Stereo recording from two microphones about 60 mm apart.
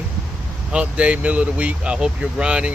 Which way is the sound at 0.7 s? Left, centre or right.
Right.